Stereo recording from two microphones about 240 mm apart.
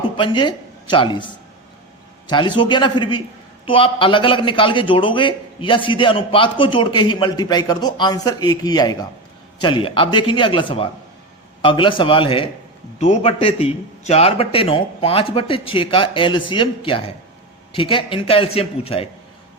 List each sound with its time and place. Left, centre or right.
0.2 s speech: centre
2.3 s a man's voice: centre